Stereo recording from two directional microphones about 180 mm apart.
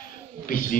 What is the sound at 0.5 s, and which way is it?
Speech, 50° left (ahead or behind).